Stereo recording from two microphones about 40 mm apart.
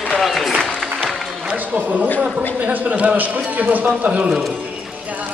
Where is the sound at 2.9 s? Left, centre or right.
Right.